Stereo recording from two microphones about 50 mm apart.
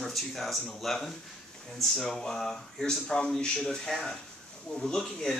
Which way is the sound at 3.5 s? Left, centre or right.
Centre.